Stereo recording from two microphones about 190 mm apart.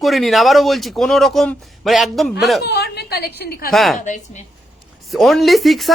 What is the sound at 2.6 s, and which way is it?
A woman's voice, 60° left (ahead or behind).